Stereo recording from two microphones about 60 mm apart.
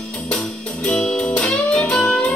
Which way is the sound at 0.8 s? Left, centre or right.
Centre.